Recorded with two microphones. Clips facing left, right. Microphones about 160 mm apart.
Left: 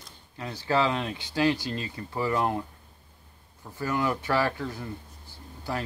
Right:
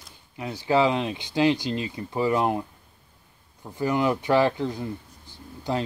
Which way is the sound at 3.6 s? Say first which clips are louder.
Right 5 dB; 15° right (ahead or behind).